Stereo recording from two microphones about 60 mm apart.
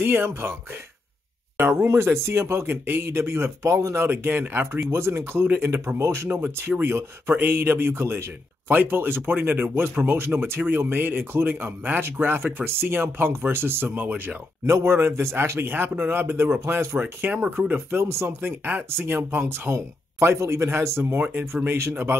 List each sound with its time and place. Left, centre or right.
0.0 s a man's voice: right
1.6 s speech: right
3.9 s a man's voice: right
4.9 s speech: right
6.3 s a man's voice: right
14.7 s speech: right
15.7 s a man's voice: right
19.7 s speech: right
21.2 s a man's voice: right